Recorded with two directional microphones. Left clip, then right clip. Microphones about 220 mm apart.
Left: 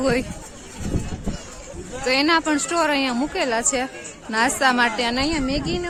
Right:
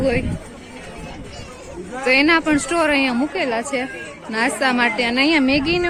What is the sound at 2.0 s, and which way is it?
A woman's voice, 10° left (ahead or behind).